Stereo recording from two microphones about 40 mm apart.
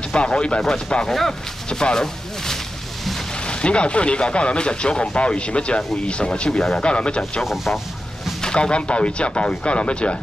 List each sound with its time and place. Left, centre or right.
0.1 s speech: left
1.0 s speech: centre
1.7 s a sound: centre
3.4 s speech: left
7.4 s speech: centre
8.4 s speech: left